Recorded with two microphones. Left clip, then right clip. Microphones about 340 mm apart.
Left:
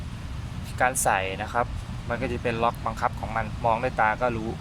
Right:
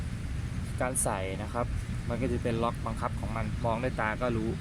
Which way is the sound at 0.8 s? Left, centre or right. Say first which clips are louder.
Left 9 dB; left.